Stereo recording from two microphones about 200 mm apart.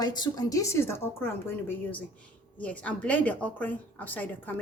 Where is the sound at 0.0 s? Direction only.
20° left (ahead or behind).